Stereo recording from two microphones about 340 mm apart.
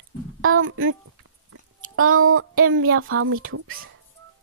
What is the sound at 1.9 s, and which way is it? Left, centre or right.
Speech, right.